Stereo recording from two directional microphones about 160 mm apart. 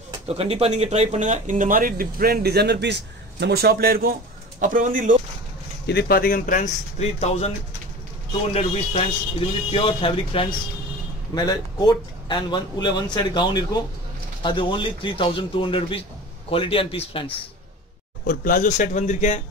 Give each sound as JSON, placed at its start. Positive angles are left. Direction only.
{"t": 0.3, "sound": "speech", "side_deg": -40}
{"t": 4.6, "sound": "speech", "side_deg": -55}
{"t": 5.9, "sound": "speech", "side_deg": 80}
{"t": 8.5, "sound": "speech", "side_deg": 40}
{"t": 11.3, "sound": "speech", "side_deg": 25}
{"t": 18.2, "sound": "speech", "side_deg": 60}